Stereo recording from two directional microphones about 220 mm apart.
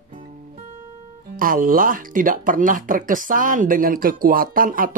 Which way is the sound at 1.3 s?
40° right (ahead or behind).